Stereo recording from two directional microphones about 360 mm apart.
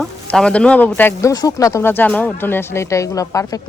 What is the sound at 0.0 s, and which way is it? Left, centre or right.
A woman's voice, centre.